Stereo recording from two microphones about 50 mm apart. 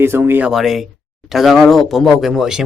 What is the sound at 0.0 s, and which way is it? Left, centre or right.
Speech, right.